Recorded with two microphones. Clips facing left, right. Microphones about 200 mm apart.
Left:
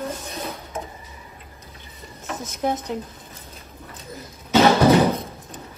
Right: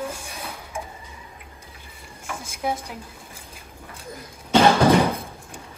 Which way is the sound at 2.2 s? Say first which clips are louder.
Left 3 dB; 10° right (ahead or behind).